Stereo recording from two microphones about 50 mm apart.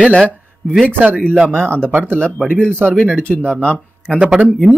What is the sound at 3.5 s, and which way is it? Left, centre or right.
Speech, left.